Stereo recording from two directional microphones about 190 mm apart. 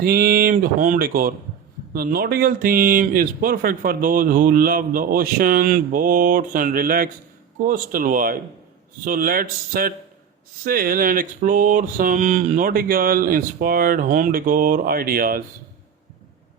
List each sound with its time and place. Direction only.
0.0 s speech: 50° right (ahead or behind)